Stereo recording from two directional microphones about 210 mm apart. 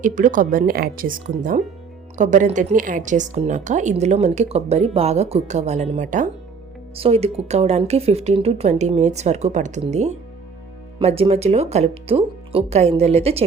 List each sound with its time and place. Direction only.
0.0 s speech: 40° right (ahead or behind)